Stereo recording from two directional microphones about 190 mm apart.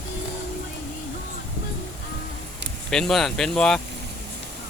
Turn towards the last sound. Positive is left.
turn(degrees=5)  # may be behind; listen again after turning